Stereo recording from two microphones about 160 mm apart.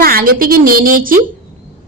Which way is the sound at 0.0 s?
65° right (ahead or behind).